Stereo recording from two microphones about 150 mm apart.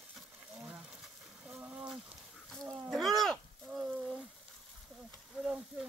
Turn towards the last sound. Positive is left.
turn(degrees=-5)  # may be behind; listen again after turning